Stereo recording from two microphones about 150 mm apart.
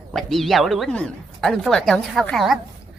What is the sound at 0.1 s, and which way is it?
Speech, centre (ahead or behind).